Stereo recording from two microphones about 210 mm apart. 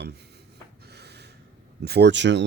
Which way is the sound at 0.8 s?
50° right (ahead or behind).